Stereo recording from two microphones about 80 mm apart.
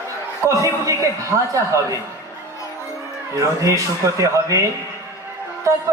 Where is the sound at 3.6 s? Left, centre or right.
Right.